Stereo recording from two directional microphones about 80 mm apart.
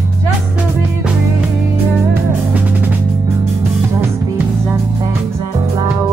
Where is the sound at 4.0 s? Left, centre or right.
Right.